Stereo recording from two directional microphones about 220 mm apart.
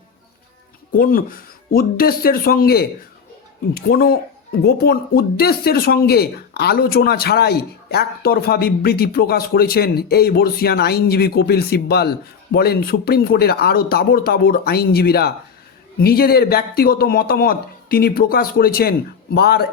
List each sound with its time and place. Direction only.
0.9 s speech: 40° left (ahead or behind)